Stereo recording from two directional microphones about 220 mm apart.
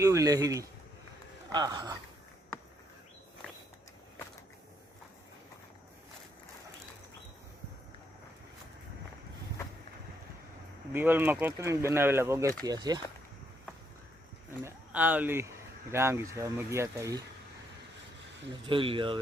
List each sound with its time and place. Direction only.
0.0 s speech: 15° right (ahead or behind)
10.9 s speech: 10° right (ahead or behind)
14.6 s speech: 10° right (ahead or behind)
18.6 s speech: 25° right (ahead or behind)